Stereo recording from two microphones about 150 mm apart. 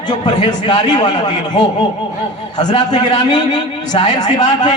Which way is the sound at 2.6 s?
30° left (ahead or behind).